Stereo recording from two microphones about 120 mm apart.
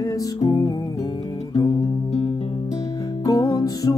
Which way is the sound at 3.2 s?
30° left (ahead or behind).